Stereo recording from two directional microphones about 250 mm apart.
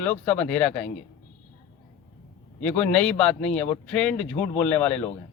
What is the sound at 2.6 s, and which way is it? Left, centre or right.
Speech, centre.